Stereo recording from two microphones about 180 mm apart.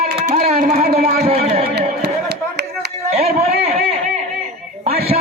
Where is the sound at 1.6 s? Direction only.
65° right (ahead or behind).